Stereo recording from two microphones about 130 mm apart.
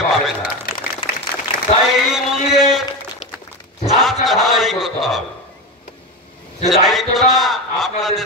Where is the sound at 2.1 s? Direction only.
5° right (ahead or behind).